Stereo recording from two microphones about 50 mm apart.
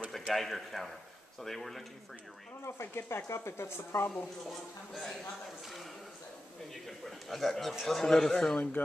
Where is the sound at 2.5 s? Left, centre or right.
Left.